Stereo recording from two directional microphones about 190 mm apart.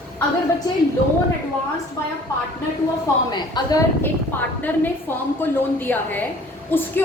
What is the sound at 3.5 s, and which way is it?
A woman's voice, 20° left (ahead or behind).